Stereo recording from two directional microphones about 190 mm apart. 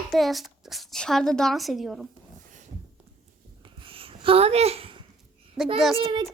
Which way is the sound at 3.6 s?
25° right (ahead or behind).